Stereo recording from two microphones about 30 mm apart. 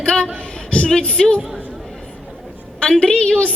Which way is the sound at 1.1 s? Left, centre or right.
Left.